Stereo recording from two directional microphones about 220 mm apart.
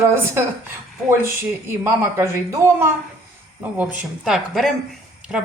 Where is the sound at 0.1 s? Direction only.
10° right (ahead or behind).